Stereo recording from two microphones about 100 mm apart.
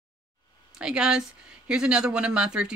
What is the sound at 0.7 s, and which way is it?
Speech, 10° right (ahead or behind).